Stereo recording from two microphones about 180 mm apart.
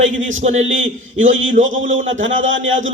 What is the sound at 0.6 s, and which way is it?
A man's voice, 90° right.